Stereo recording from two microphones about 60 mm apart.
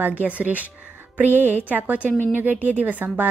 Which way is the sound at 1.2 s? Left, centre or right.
Right.